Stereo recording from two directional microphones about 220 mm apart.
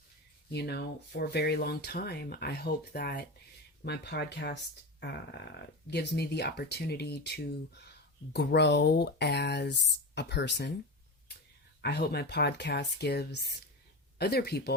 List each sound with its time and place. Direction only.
0.5 s speech: 45° left (ahead or behind)
11.8 s speech: 50° left (ahead or behind)